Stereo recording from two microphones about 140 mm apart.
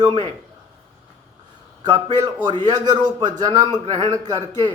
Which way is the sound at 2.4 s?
30° right (ahead or behind).